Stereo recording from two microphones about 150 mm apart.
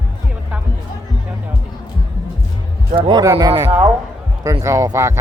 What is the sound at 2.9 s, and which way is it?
Speech, 35° right (ahead or behind).